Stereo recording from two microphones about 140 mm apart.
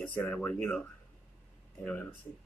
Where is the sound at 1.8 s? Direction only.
10° left (ahead or behind).